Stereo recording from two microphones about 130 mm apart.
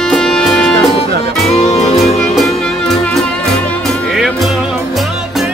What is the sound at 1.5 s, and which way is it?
Music, 55° left (ahead or behind).